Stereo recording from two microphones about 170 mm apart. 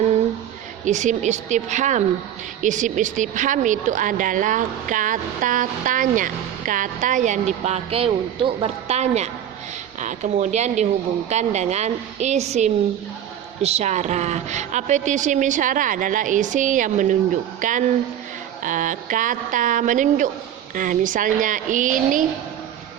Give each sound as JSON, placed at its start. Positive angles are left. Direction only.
{"t": 0.9, "sound": "a woman's voice", "side_deg": -45}